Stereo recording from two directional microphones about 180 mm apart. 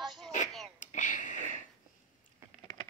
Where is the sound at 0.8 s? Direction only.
45° left (ahead or behind).